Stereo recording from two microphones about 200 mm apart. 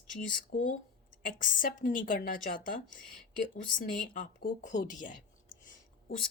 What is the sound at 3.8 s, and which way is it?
A woman's voice, 40° left (ahead or behind).